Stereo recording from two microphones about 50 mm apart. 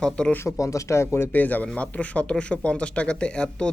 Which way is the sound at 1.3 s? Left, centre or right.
Left.